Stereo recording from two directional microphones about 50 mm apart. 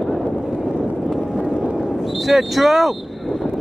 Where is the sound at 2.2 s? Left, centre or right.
Centre.